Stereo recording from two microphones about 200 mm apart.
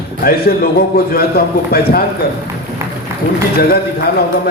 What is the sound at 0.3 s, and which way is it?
A man's voice, 50° left (ahead or behind).